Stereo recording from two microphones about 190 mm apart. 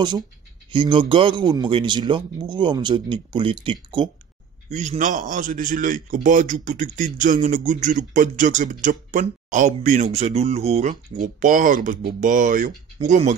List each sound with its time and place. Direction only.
0.7 s speech: 25° right (ahead or behind)
4.6 s speech: 40° right (ahead or behind)